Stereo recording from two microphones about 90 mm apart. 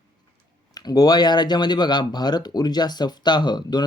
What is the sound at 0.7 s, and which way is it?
Speech, 45° left (ahead or behind).